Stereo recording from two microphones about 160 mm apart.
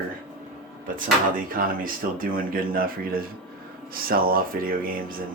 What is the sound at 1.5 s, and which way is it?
Speech, 60° right (ahead or behind).